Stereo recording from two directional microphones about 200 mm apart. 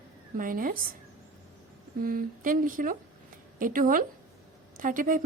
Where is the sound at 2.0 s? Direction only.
45° right (ahead or behind).